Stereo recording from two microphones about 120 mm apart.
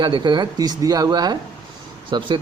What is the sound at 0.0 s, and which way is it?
A man's voice, 40° right (ahead or behind).